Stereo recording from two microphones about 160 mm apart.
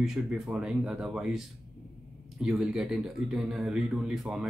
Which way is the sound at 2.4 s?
Centre (ahead or behind).